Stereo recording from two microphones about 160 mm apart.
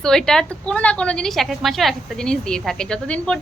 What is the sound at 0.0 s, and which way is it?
A woman's voice, 5° left (ahead or behind).